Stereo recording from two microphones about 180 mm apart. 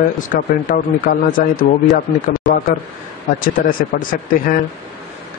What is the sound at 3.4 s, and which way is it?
Speech, 50° left (ahead or behind).